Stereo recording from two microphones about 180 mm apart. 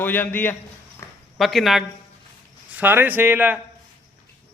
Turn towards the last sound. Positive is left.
turn(degrees=-10)  # may be behind; listen again after turning